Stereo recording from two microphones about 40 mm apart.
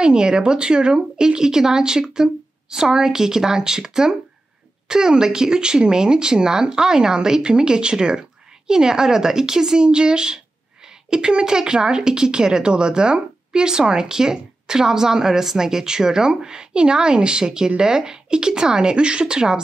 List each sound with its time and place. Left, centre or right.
0.0 s a woman's voice: right